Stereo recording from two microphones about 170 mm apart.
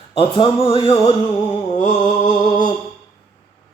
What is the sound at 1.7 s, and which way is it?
Mantra, 45° left (ahead or behind).